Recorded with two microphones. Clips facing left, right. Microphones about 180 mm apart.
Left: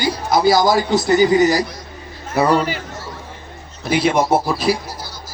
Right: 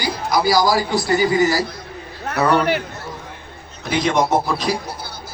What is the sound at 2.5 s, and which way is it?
Speech, 65° right (ahead or behind).